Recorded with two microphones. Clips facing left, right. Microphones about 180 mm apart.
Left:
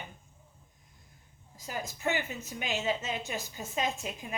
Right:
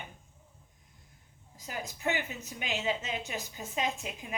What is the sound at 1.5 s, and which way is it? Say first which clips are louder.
A woman's voice: left 2 dB; 15° right (ahead or behind).